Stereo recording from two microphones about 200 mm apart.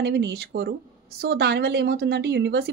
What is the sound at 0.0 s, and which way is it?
A woman's voice, 55° right (ahead or behind).